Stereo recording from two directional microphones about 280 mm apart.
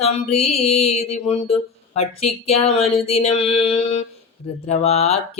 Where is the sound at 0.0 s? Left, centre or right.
Left.